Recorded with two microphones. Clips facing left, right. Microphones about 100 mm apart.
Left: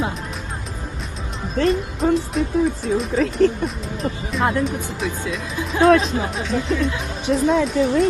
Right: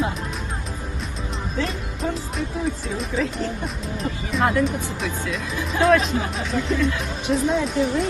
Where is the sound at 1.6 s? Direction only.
Centre (ahead or behind).